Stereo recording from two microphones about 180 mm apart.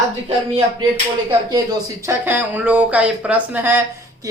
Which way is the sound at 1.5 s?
20° right (ahead or behind).